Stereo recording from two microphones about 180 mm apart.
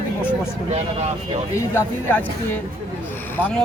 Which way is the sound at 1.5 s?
10° left (ahead or behind).